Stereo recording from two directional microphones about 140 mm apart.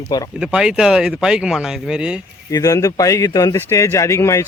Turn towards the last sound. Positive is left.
turn(degrees=20)  # may be behind; listen again after turning